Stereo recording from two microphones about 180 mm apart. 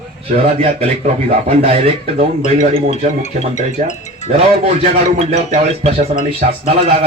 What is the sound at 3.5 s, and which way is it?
Speech, 40° left (ahead or behind).